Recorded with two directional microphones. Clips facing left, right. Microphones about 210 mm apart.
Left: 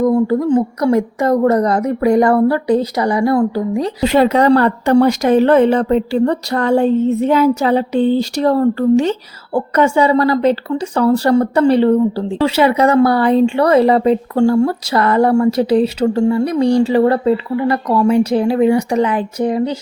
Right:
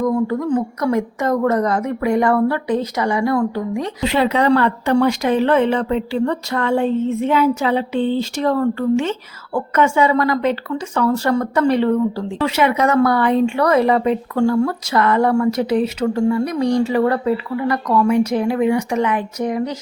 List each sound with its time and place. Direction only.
0.0 s a woman's voice: 35° left (ahead or behind)